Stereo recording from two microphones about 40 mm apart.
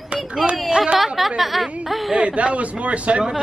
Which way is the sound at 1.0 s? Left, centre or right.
Centre.